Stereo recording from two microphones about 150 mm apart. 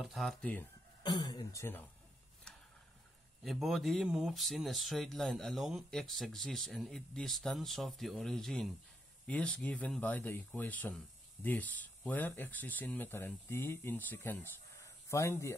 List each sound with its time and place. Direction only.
0.0 s speech: centre (ahead or behind)
1.0 s speech: 25° left (ahead or behind)
3.4 s speech: centre (ahead or behind); by 15.5 s 20° left (ahead or behind)